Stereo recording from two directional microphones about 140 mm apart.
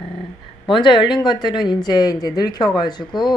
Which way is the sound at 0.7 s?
35° left (ahead or behind).